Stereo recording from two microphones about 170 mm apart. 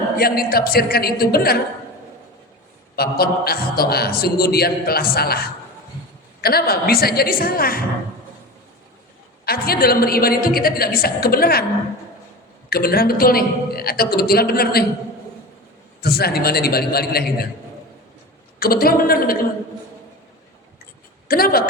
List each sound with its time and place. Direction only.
0.2 s a man's voice: 60° left (ahead or behind)
2.9 s a man's voice: 65° left (ahead or behind)
9.5 s a man's voice: 60° left (ahead or behind)
12.7 s a man's voice: 65° left (ahead or behind)
16.0 s a man's voice: 65° left (ahead or behind)
18.6 s a man's voice: 60° left (ahead or behind)
21.2 s speech: 60° left (ahead or behind)